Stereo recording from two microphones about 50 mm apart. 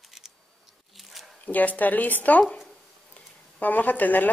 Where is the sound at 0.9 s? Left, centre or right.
Centre.